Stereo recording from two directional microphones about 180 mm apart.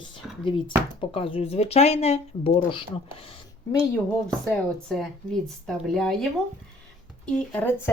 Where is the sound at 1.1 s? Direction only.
30° left (ahead or behind).